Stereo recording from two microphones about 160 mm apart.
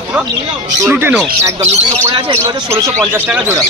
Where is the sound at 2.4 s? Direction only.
20° right (ahead or behind).